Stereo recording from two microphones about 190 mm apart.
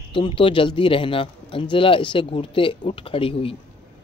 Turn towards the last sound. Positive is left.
turn(degrees=30)  # may be behind; listen again after turning